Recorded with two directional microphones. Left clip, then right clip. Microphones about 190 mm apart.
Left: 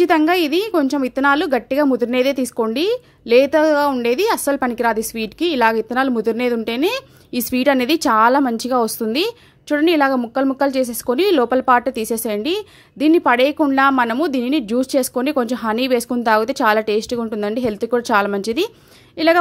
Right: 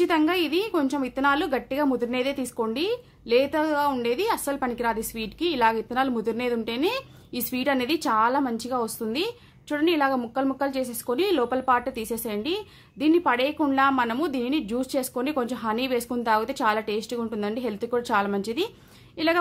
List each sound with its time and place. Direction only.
0.0 s a woman's voice: 35° left (ahead or behind)